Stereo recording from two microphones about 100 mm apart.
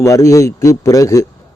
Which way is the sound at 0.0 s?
30° left (ahead or behind).